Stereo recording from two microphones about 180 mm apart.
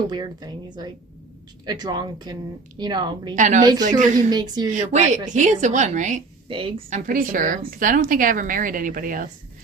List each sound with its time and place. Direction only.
0.1 s speech: 20° right (ahead or behind)
3.3 s a woman's voice: 45° right (ahead or behind)
3.6 s speech: 25° right (ahead or behind)
3.8 s a woman's voice: 45° right (ahead or behind)
4.3 s speech: 25° right (ahead or behind)
4.7 s a woman's voice: 40° right (ahead or behind)
6.5 s a woman's voice: 30° right (ahead or behind)
7.1 s a woman's voice: 50° right (ahead or behind)